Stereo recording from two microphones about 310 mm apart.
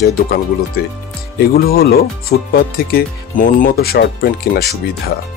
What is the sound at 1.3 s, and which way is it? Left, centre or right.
Speech, left.